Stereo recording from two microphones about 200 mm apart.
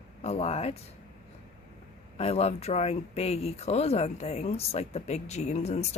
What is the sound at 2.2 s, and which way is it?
Speech, 30° left (ahead or behind).